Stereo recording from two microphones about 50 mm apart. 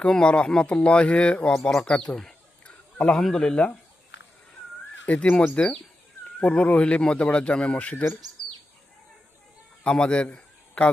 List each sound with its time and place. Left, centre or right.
0.0 s speech: centre
1.5 s bird: centre
3.2 s speech: centre
3.4 s speech: centre
5.0 s speech: left
9.8 s a man's voice: centre